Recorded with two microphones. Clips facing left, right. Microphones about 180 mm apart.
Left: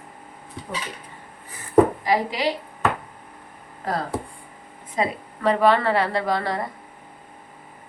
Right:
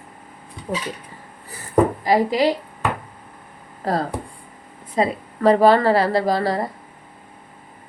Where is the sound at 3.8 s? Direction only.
35° right (ahead or behind).